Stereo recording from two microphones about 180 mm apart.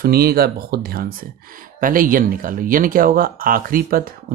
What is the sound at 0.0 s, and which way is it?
Speech, 55° right (ahead or behind).